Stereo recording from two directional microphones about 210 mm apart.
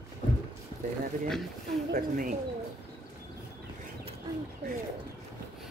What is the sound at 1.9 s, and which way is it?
Speech, 40° right (ahead or behind).